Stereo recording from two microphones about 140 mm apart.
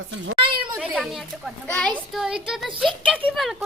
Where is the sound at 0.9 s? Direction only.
Centre (ahead or behind).